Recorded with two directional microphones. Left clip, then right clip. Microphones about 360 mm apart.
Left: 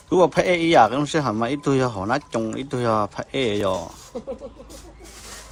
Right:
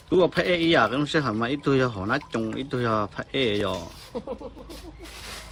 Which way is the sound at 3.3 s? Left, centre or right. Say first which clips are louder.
Left 1 dB; left.